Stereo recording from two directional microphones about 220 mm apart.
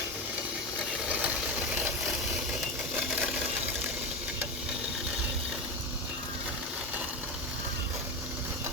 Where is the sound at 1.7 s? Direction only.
10° right (ahead or behind).